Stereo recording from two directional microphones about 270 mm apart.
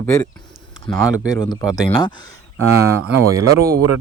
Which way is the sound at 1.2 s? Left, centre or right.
Centre.